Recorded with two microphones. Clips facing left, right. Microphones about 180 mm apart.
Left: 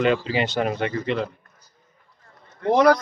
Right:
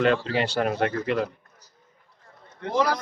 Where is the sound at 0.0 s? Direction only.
Centre (ahead or behind).